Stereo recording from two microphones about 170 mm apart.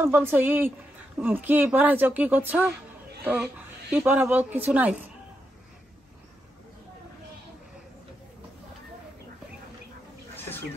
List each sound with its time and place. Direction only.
0.0 s a woman's voice: 15° right (ahead or behind)